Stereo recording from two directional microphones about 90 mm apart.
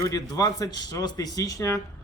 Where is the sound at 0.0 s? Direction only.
45° left (ahead or behind).